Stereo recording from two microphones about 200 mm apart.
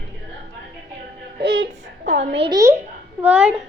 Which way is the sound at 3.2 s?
5° right (ahead or behind).